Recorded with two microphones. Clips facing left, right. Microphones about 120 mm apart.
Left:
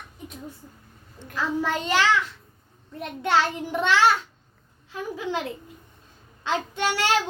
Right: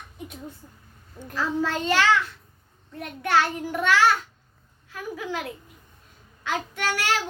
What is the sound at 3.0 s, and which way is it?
A child's voice, 25° left (ahead or behind).